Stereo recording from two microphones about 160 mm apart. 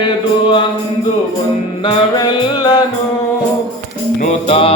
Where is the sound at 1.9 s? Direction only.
30° left (ahead or behind).